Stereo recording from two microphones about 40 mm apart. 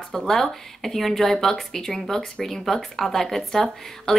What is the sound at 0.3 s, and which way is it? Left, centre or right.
Speech, centre.